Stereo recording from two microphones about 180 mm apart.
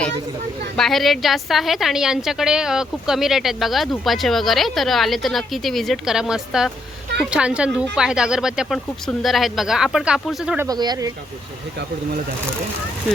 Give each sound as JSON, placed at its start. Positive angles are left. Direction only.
{"t": 0.8, "sound": "a woman's voice", "side_deg": 0}
{"t": 10.7, "sound": "speech", "side_deg": -20}